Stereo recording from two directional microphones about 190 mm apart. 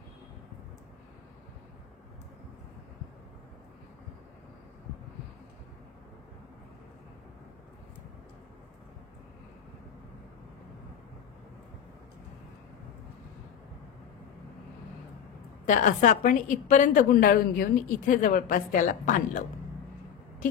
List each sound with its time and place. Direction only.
15.6 s a woman's voice: 40° left (ahead or behind)